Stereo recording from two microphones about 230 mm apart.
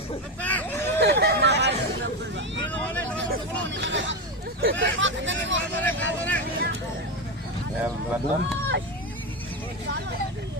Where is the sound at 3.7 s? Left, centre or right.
Right.